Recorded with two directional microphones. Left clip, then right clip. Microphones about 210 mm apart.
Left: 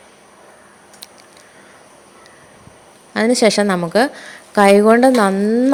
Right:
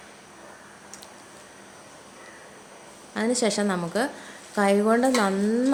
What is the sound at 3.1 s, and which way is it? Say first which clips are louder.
A woman's voice: left 11 dB; 40° left (ahead or behind).